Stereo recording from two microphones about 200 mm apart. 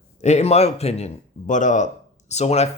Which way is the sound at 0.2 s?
35° left (ahead or behind).